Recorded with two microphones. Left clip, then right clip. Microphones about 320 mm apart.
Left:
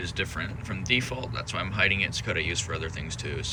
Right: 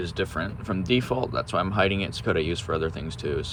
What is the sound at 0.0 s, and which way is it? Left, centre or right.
Speech, centre.